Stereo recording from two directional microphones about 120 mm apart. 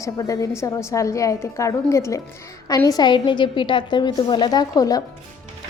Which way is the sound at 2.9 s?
35° left (ahead or behind).